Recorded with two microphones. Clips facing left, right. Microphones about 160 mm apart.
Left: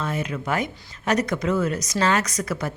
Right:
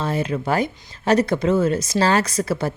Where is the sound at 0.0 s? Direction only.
30° right (ahead or behind).